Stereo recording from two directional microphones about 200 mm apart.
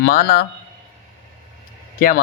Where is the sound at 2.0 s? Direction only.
45° left (ahead or behind).